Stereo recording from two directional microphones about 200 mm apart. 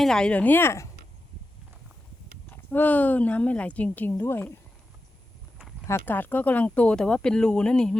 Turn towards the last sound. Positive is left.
turn(degrees=5)  # may be behind; listen again after turning